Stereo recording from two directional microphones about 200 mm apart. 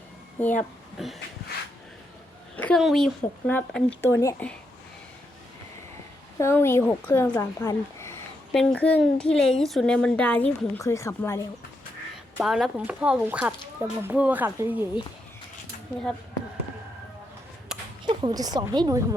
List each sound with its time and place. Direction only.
2.6 s a woman's voice: 5° left (ahead or behind)
6.4 s a woman's voice: 10° left (ahead or behind)
12.4 s speech: centre (ahead or behind)
17.7 s a sound: centre (ahead or behind)
18.0 s a woman's voice: 20° right (ahead or behind)